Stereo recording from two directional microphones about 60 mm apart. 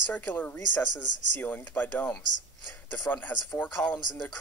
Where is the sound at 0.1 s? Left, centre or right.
Left.